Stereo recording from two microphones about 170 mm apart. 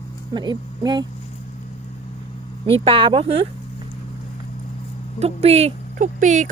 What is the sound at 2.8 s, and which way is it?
Speech, 30° right (ahead or behind).